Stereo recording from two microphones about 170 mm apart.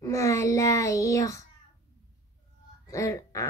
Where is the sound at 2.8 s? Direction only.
20° left (ahead or behind).